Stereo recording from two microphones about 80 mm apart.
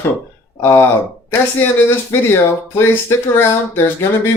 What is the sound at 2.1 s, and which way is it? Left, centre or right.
Speech, left.